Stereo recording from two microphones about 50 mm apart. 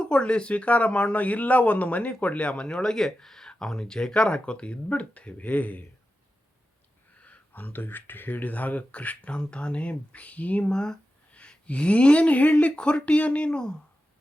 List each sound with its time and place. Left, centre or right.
0.0 s speech: centre
7.2 s speech: left
10.6 s speech: centre